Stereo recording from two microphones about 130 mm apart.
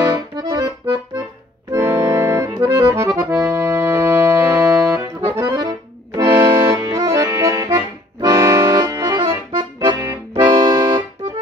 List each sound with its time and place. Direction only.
0.0 s accordion: 35° right (ahead or behind)
1.7 s accordion: 20° right (ahead or behind)
5.6 s accordion: 30° right (ahead or behind)